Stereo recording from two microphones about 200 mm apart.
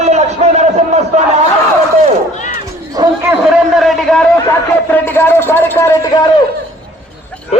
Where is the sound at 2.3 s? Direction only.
40° left (ahead or behind).